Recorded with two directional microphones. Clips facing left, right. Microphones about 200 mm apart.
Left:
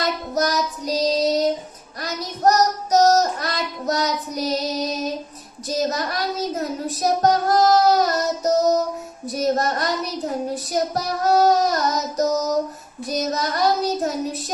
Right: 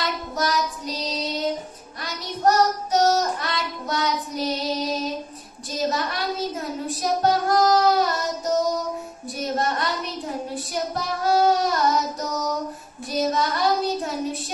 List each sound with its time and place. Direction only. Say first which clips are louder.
0.0 s child singing: left 4 dB; 40° left (ahead or behind)